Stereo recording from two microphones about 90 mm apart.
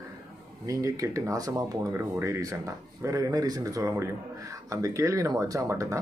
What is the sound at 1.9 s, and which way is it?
Speech, 30° right (ahead or behind).